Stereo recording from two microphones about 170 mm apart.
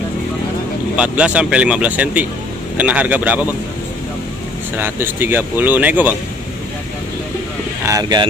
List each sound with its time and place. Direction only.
0.9 s speech: 5° right (ahead or behind)
4.7 s speech: 10° right (ahead or behind)
7.8 s speech: 20° right (ahead or behind)